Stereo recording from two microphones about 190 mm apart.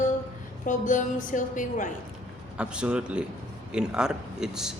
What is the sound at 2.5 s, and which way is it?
Speech, 5° right (ahead or behind).